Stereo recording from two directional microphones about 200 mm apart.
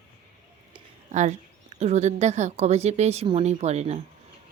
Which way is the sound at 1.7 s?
35° right (ahead or behind).